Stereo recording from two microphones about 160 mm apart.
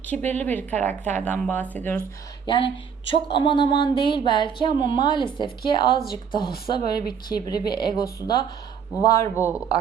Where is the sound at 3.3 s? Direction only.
30° left (ahead or behind).